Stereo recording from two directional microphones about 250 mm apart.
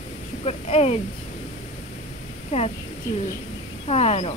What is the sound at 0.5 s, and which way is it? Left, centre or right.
Speech, left.